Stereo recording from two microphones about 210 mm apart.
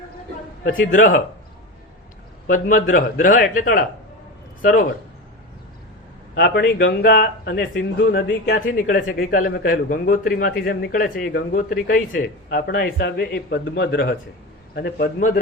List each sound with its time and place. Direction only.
0.7 s a man's voice: 40° left (ahead or behind)
2.5 s a man's voice: 40° left (ahead or behind)
6.3 s speech: 50° left (ahead or behind)